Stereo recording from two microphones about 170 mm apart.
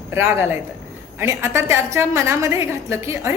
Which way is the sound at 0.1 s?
15° right (ahead or behind).